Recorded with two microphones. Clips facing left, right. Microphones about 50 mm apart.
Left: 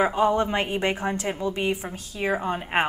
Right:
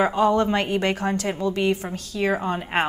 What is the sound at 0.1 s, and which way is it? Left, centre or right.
A woman's voice, left.